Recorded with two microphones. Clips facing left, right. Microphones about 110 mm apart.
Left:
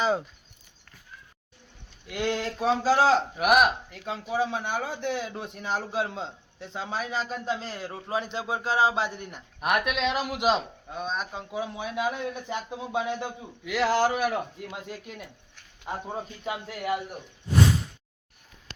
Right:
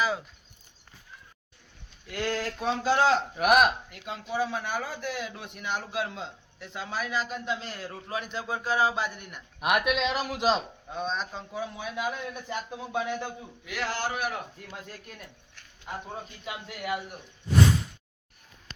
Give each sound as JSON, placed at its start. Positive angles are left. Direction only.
{"t": 2.0, "sound": "a man's voice", "side_deg": 15}
{"t": 2.6, "sound": "a man's voice", "side_deg": 35}
{"t": 3.3, "sound": "a man's voice", "side_deg": 5}
{"t": 4.0, "sound": "a man's voice", "side_deg": 30}
{"t": 9.6, "sound": "a man's voice", "side_deg": -5}
{"t": 13.7, "sound": "a man's voice", "side_deg": 90}
{"t": 14.7, "sound": "speech", "side_deg": 15}
{"t": 16.1, "sound": "a man's voice", "side_deg": 35}